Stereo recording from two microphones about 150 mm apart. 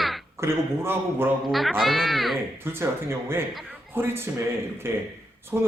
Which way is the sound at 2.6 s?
15° right (ahead or behind).